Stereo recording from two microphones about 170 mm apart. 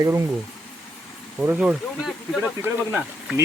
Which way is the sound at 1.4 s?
10° right (ahead or behind).